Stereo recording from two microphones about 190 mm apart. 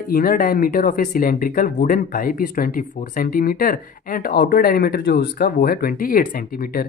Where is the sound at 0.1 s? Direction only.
50° left (ahead or behind).